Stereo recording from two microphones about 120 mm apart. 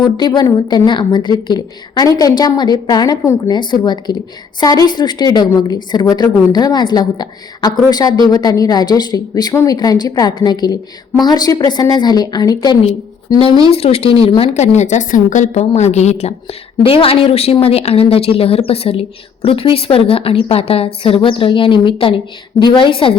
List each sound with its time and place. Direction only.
0.0 s a woman's voice: 40° left (ahead or behind)
13.7 s a woman's voice: 55° left (ahead or behind)
14.5 s a woman's voice: 70° left (ahead or behind); by 23.1 s 45° left (ahead or behind)